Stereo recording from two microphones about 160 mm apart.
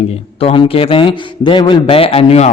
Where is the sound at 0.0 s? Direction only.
40° left (ahead or behind).